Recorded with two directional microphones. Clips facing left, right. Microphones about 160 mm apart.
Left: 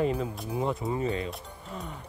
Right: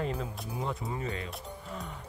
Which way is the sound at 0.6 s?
25° left (ahead or behind).